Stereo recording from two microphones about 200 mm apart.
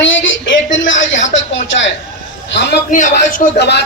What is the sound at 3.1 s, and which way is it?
Speech, 40° left (ahead or behind).